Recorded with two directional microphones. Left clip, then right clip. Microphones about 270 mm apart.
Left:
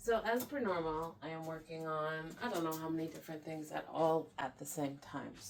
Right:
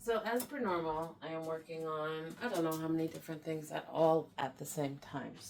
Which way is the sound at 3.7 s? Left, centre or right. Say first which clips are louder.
Right 3 dB; right.